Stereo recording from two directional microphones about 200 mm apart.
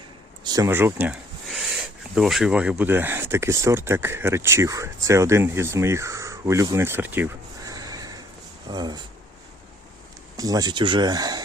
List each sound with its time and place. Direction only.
0.4 s speech: 15° right (ahead or behind)
8.7 s a sound: 20° right (ahead or behind)
10.3 s speech: 20° right (ahead or behind)